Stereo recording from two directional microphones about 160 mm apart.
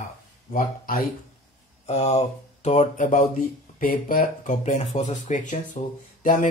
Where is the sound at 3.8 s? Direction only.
60° left (ahead or behind).